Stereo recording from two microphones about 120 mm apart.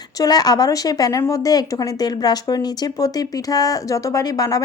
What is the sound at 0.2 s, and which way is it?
Speech, 35° left (ahead or behind).